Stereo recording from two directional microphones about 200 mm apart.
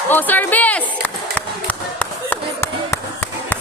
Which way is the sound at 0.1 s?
10° left (ahead or behind).